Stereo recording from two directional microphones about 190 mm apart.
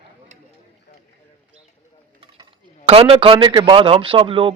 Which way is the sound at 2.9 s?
30° right (ahead or behind).